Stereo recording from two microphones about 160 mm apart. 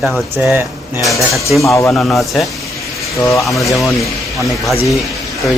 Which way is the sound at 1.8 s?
5° left (ahead or behind).